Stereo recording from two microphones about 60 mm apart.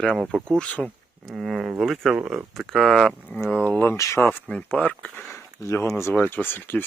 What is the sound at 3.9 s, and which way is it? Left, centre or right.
Speech, left.